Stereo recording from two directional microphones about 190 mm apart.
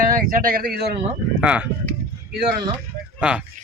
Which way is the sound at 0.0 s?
50° right (ahead or behind).